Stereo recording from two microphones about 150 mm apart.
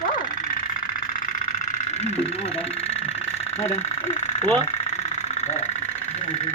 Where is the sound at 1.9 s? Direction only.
45° left (ahead or behind).